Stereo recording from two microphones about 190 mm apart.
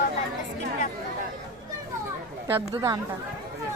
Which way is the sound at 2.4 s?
15° right (ahead or behind).